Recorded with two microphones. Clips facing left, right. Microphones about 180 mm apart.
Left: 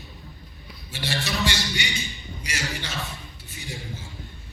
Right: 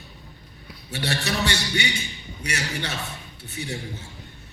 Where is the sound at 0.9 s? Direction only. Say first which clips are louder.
Right 3 dB; 65° right (ahead or behind).